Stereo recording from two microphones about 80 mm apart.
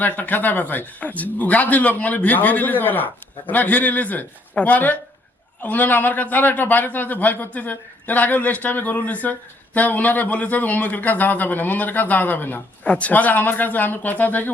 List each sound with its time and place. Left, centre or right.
0.0 s a man's voice: left